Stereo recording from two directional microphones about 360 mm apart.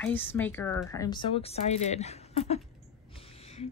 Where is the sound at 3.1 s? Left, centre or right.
Centre.